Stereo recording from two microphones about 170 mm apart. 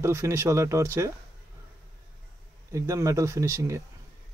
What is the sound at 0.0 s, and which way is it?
Speech, 15° right (ahead or behind).